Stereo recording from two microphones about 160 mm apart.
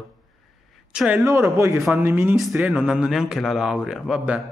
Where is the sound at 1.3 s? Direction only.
15° right (ahead or behind).